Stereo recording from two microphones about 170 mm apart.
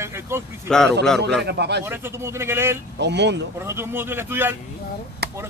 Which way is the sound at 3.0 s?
90° right.